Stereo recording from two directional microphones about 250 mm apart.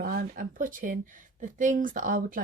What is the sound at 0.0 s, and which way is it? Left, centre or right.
Speech, right.